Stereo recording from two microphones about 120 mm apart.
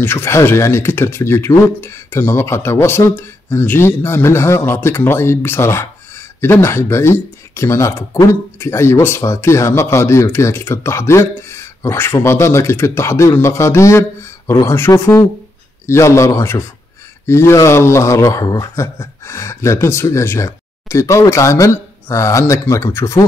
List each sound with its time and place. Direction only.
0.0 s speech: 20° left (ahead or behind)